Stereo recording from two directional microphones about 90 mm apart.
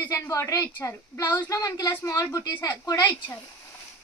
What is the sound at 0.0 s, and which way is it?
A woman's voice, 35° left (ahead or behind).